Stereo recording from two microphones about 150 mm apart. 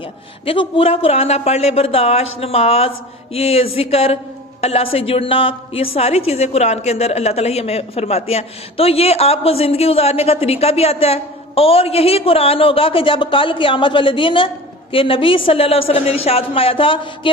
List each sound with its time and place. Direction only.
0.4 s a man's voice: 35° left (ahead or behind)